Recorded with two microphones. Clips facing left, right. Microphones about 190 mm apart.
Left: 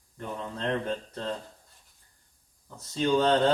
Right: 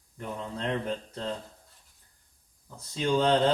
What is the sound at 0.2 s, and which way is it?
A man's voice, 10° right (ahead or behind).